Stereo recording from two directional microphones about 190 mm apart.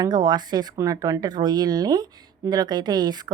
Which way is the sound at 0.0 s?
20° right (ahead or behind).